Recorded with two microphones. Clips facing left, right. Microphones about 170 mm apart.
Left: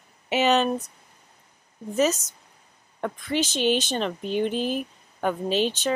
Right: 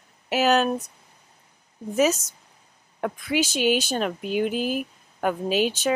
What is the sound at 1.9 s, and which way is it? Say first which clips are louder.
Speech: right 1 dB; 5° right (ahead or behind).